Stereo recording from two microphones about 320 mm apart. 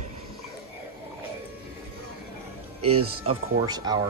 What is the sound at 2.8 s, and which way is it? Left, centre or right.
Speech, right.